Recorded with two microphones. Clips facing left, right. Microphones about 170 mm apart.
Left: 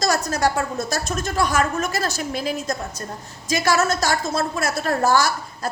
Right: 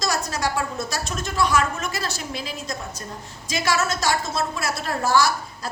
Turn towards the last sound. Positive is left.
turn(degrees=45)  # may be behind; listen again after turning